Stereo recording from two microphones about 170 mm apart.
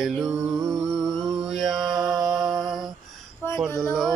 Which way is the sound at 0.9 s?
Centre (ahead or behind).